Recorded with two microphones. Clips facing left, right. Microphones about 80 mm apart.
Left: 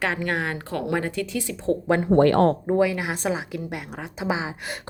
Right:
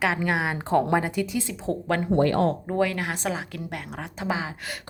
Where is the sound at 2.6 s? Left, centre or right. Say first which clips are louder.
Left 3 dB; centre.